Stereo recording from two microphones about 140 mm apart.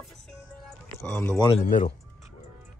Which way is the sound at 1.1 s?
15° left (ahead or behind).